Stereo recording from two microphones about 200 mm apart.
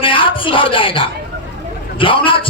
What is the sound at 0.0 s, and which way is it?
A man's voice, 25° left (ahead or behind).